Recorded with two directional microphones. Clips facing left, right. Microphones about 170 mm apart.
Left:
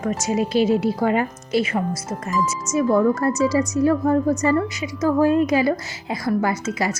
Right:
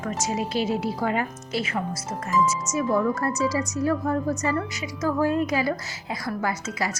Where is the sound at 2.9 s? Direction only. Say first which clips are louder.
Left 6 dB; 30° left (ahead or behind).